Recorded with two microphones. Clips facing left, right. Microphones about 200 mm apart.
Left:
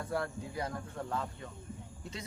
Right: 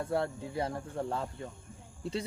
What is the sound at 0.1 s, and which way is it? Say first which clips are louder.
A man's voice: right 1 dB; 25° right (ahead or behind).